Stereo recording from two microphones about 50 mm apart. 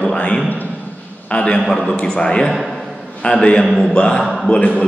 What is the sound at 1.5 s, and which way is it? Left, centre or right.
Speech, centre.